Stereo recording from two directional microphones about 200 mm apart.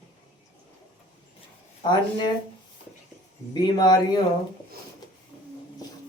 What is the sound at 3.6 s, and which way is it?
Speech, 20° left (ahead or behind).